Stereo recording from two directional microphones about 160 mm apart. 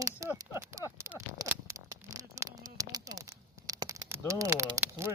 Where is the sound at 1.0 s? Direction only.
15° right (ahead or behind).